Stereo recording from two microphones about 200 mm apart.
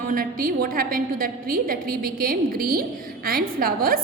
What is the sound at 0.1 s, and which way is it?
A woman's voice, 45° right (ahead or behind).